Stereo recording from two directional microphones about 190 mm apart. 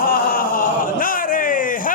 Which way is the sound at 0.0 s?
50° left (ahead or behind).